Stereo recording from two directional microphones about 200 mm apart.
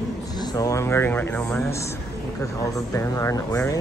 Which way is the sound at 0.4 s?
20° left (ahead or behind).